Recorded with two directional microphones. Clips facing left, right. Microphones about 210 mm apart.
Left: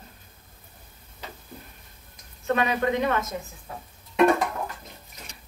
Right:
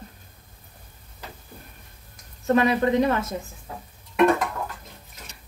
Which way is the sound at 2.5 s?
35° right (ahead or behind).